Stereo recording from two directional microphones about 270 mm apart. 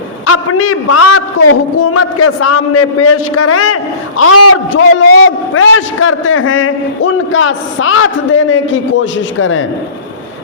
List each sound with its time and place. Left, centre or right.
0.3 s a man's voice: left